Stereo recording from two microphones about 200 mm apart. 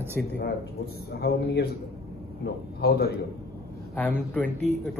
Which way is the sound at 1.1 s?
55° left (ahead or behind).